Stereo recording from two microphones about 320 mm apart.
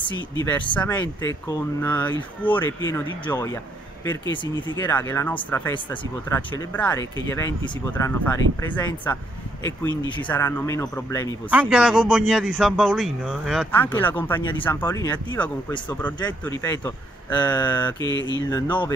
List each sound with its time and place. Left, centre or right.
0.0 s speech: centre
11.5 s speech: centre
18.1 s mantra: left
18.5 s speech: centre